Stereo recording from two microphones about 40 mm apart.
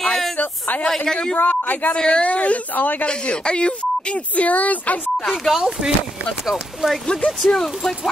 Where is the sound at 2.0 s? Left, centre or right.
Left.